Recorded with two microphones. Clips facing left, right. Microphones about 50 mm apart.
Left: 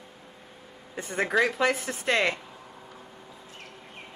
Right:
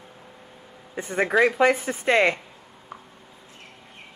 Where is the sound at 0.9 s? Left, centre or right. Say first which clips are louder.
Right 4 dB; centre.